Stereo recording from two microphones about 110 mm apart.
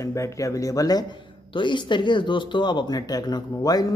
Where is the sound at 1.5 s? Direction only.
45° left (ahead or behind).